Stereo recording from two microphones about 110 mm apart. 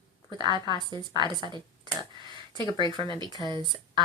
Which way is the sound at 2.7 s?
45° right (ahead or behind).